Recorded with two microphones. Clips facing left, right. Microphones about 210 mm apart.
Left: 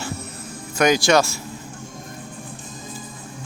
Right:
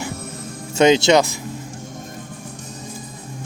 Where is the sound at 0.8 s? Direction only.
25° right (ahead or behind).